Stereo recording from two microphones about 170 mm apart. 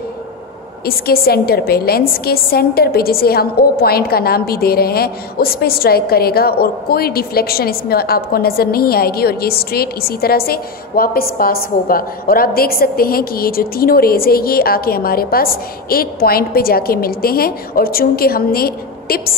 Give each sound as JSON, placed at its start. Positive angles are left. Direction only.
{"t": 0.8, "sound": "a woman's voice", "side_deg": 65}